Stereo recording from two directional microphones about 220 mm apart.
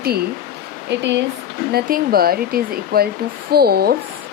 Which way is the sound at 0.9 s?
50° right (ahead or behind).